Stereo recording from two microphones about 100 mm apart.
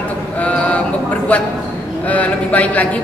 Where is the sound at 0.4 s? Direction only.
15° left (ahead or behind).